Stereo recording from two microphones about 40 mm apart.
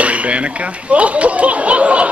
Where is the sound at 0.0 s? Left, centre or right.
Right.